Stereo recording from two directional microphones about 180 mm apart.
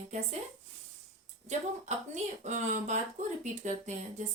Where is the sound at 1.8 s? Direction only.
40° right (ahead or behind).